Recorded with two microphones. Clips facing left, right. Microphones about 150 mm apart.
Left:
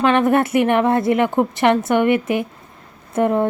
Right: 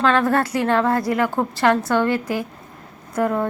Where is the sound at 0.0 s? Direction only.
20° left (ahead or behind).